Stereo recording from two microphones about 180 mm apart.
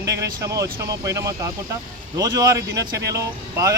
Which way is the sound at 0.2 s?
20° right (ahead or behind).